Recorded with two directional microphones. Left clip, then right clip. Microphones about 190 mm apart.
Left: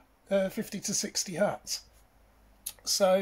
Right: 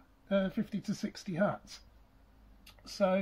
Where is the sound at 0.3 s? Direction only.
20° left (ahead or behind).